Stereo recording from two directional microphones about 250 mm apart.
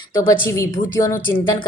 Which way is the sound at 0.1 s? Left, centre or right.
Centre.